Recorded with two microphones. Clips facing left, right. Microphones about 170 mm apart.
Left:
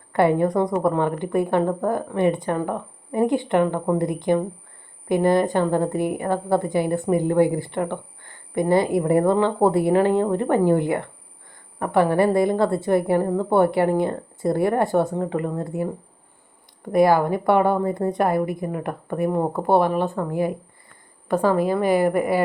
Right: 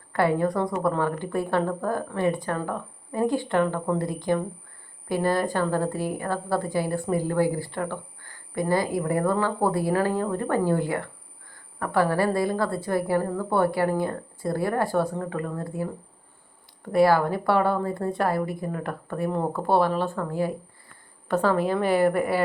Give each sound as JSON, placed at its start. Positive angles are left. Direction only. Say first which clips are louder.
{"t": 0.1, "sound": "a woman's voice", "louder": "left 4 dB", "side_deg": 20}